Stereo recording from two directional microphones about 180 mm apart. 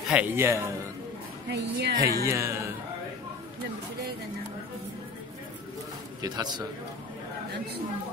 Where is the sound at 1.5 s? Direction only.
70° right (ahead or behind).